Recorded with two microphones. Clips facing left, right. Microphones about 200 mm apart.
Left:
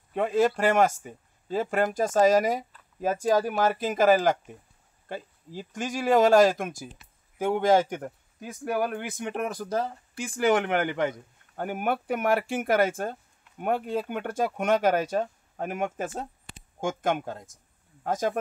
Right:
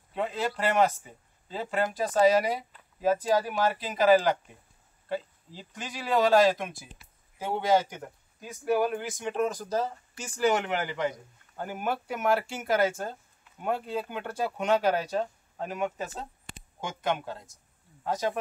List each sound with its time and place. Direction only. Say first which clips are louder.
0.1 s speech: left 7 dB; 50° left (ahead or behind)